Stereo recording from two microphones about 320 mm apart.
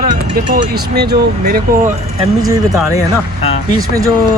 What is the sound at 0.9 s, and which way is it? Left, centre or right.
Speech, right.